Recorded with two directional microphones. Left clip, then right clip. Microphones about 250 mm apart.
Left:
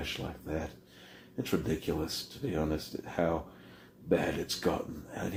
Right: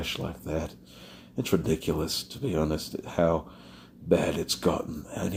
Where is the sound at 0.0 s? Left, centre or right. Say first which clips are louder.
Right 5 dB; right.